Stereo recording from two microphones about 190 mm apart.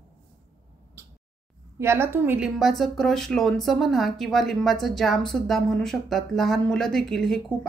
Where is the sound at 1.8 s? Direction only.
15° right (ahead or behind).